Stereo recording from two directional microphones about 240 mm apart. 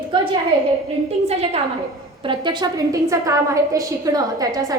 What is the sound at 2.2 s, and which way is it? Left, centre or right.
A woman's voice, centre.